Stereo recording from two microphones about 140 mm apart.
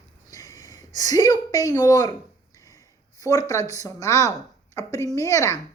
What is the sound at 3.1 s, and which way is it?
Speech, 25° left (ahead or behind).